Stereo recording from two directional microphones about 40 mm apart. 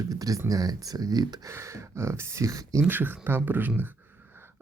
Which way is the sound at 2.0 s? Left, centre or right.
Right.